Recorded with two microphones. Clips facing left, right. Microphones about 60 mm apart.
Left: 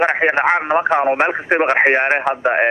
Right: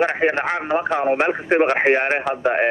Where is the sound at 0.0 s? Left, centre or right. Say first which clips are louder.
Left 4 dB; left.